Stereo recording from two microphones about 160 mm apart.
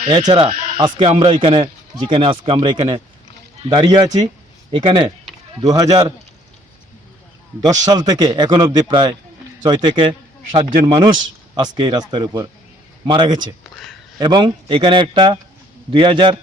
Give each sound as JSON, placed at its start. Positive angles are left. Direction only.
{"t": 0.0, "sound": "speech", "side_deg": -25}
{"t": 7.9, "sound": "a man's voice", "side_deg": -25}